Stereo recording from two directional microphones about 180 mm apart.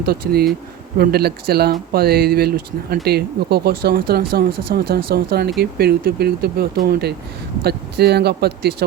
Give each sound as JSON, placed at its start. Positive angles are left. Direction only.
{"t": 0.0, "sound": "speech", "side_deg": -60}